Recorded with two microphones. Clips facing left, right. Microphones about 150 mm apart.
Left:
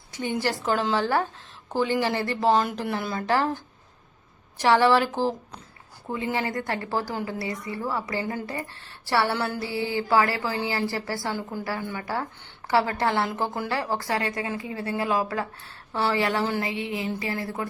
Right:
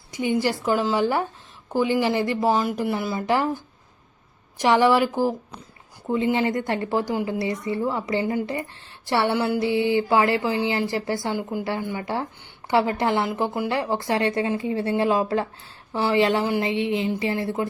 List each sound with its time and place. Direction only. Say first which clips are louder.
0.1 s a woman's voice: right 4 dB; 15° right (ahead or behind)
2.5 s speech: left 3 dB; centre (ahead or behind); by 17.7 s 20° right (ahead or behind)